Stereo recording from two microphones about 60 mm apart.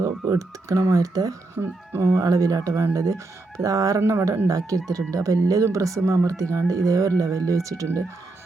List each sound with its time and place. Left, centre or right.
0.0 s speech: right
1.5 s speech: right
2.1 s speech: right
2.9 s speech: right
4.0 s speech: right
4.4 s speech: right